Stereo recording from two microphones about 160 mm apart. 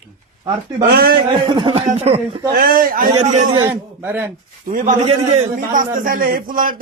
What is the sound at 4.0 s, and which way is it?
Speech, 15° right (ahead or behind).